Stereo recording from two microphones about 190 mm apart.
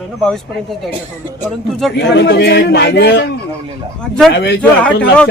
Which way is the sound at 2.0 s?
65° left (ahead or behind).